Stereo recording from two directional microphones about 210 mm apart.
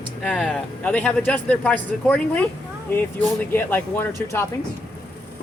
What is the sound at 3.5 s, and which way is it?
Speech, 10° left (ahead or behind).